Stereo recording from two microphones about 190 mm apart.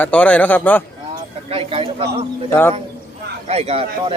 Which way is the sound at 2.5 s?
10° left (ahead or behind).